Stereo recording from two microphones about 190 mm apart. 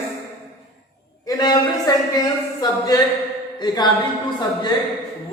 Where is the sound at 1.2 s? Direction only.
20° left (ahead or behind).